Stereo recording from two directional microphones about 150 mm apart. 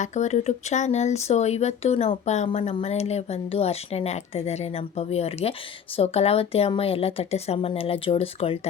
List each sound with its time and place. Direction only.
0.0 s speech: 50° left (ahead or behind)